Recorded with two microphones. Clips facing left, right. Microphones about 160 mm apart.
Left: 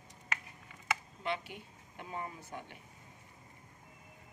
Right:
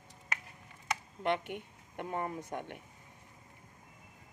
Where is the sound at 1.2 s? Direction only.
60° right (ahead or behind).